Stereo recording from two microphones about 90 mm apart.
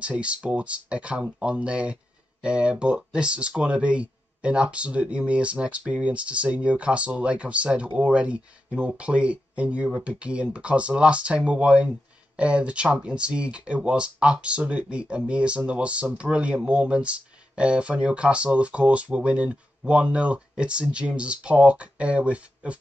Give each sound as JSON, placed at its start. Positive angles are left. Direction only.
{"t": 0.0, "sound": "speech", "side_deg": -15}